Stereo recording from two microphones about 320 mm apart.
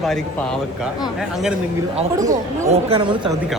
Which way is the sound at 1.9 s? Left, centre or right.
Centre.